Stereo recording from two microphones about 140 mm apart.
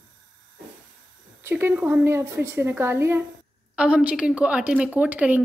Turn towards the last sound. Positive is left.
turn(degrees=-10)  # may be behind; listen again after turning